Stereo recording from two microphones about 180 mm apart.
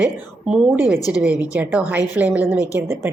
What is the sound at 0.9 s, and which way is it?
Speech, 20° left (ahead or behind).